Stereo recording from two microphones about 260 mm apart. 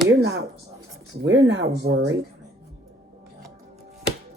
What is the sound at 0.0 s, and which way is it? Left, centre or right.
Speech, right.